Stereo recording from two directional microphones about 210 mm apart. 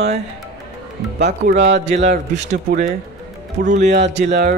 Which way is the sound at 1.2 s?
50° right (ahead or behind).